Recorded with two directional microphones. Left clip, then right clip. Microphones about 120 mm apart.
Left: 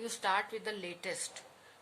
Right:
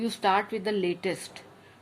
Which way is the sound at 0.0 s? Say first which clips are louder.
Right 8 dB; 25° right (ahead or behind).